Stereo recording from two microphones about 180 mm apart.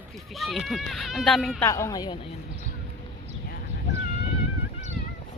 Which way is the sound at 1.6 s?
15° left (ahead or behind).